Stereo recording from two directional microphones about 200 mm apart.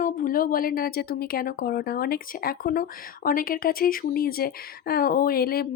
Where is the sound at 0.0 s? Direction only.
45° left (ahead or behind).